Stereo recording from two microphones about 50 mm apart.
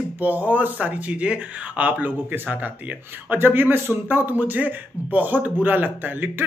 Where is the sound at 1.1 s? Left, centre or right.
Right.